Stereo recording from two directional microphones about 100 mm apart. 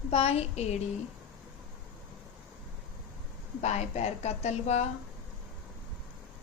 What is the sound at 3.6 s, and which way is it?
Speech, 90° left.